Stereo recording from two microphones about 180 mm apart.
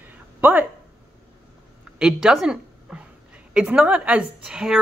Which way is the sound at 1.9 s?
5° right (ahead or behind).